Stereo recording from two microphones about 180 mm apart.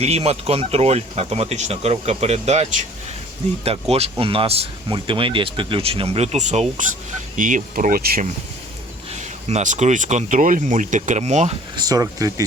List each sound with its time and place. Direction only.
0.0 s speech: 35° right (ahead or behind); by 8.3 s 55° right (ahead or behind)
9.1 s speech: 40° right (ahead or behind)
11.8 s speech: 20° right (ahead or behind)